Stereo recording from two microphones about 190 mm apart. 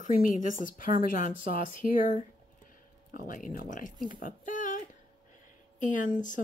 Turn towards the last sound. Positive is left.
turn(degrees=45)  # may be behind; listen again after turning